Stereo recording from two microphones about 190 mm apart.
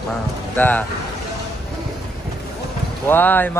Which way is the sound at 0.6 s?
10° left (ahead or behind).